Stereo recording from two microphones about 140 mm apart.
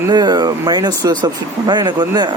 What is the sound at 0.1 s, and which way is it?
Speech, 30° right (ahead or behind).